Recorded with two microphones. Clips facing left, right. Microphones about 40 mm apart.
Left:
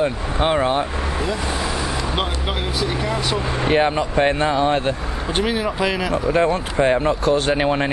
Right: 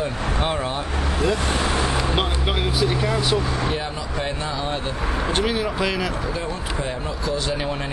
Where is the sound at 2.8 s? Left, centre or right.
Centre.